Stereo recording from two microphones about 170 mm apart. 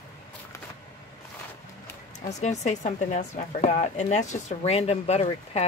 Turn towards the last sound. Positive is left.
turn(degrees=35)  # may be behind; listen again after turning